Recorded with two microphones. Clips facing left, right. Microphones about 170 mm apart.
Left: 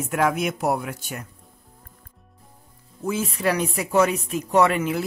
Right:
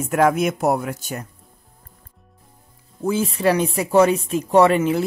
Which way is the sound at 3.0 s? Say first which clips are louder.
Right 5 dB; 30° right (ahead or behind).